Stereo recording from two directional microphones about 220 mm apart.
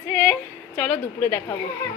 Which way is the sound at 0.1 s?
10° left (ahead or behind).